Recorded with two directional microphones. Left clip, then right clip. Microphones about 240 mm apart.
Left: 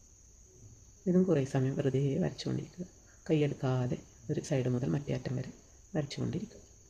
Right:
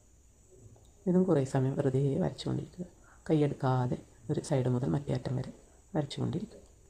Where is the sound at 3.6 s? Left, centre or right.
Centre.